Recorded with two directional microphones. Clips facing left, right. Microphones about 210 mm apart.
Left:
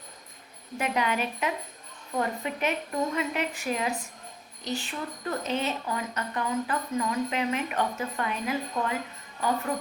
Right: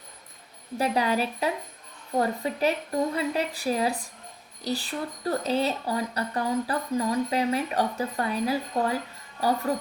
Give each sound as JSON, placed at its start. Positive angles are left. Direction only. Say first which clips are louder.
{"t": 0.8, "sound": "speech", "louder": "right 3 dB", "side_deg": -35}